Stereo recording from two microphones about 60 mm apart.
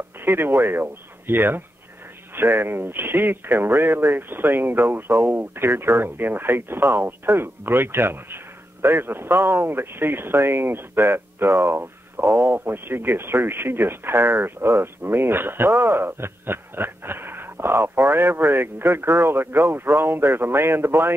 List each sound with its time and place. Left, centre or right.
0.2 s speech: right